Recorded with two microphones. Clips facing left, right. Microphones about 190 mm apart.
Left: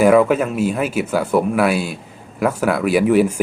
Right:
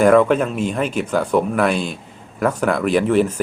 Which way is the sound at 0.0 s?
5° left (ahead or behind).